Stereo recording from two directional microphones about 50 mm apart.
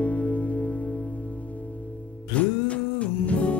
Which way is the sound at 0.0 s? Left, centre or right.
Left.